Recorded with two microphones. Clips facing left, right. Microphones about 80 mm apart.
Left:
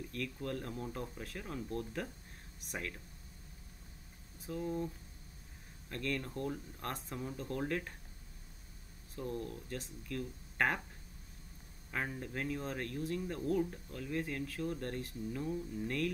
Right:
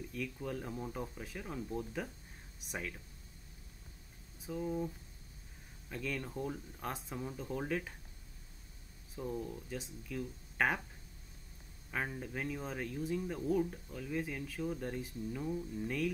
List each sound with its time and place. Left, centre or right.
0.1 s speech: centre
4.4 s speech: centre
9.1 s speech: centre
11.9 s speech: centre